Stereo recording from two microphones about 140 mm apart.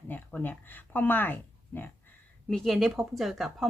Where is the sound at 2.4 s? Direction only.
Centre (ahead or behind).